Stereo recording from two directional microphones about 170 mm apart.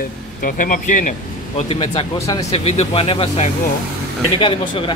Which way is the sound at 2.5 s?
35° left (ahead or behind).